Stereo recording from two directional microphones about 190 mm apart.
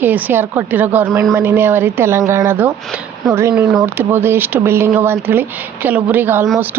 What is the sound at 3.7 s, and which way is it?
Speech, 10° right (ahead or behind).